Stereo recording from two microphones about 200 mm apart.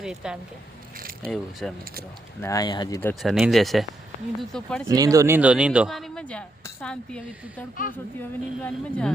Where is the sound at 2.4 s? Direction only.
15° left (ahead or behind).